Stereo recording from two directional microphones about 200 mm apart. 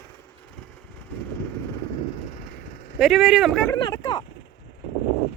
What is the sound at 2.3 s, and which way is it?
Vehicle, 40° left (ahead or behind).